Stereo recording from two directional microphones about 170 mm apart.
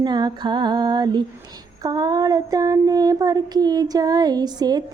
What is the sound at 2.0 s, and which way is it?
Child singing, 25° right (ahead or behind).